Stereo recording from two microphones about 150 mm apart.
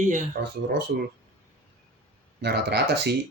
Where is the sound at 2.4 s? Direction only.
90° right.